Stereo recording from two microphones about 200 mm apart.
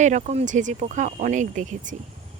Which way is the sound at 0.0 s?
35° right (ahead or behind).